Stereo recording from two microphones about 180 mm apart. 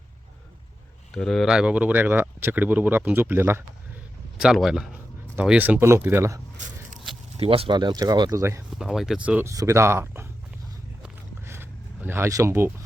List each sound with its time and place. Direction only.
1.1 s speech: centre (ahead or behind)
4.4 s speech: 5° right (ahead or behind)
7.3 s speech: 35° right (ahead or behind); by 8.6 s 15° right (ahead or behind)
8.7 s speech: centre (ahead or behind)
11.0 s a sound: 15° right (ahead or behind)